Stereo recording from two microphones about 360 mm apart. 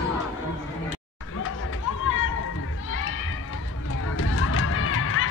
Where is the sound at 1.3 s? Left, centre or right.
Left.